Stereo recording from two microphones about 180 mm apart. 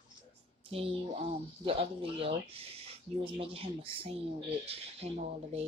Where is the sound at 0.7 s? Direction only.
30° right (ahead or behind).